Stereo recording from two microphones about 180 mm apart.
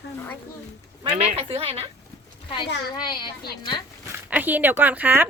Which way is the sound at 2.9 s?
25° left (ahead or behind).